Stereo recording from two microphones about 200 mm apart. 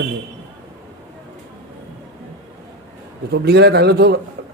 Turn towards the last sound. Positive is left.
turn(degrees=-55)  # may be behind; listen again after turning